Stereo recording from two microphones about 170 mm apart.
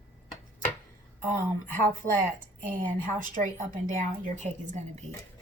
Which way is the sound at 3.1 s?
50° right (ahead or behind).